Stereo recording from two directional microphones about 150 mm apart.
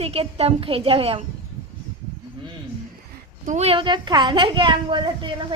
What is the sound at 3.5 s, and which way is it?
A woman's voice, 45° right (ahead or behind).